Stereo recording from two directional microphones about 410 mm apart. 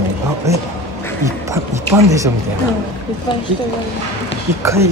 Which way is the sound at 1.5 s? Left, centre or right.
Centre.